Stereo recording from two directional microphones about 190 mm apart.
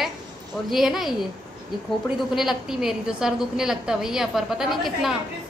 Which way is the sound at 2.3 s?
Centre (ahead or behind).